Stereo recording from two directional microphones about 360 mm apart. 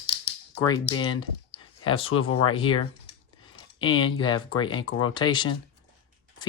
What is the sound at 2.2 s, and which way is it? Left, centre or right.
Speech, left.